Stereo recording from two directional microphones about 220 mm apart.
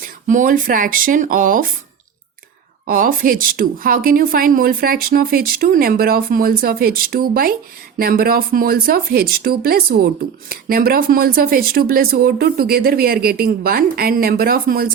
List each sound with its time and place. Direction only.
0.0 s speech: 35° right (ahead or behind)
2.8 s speech: 40° right (ahead or behind)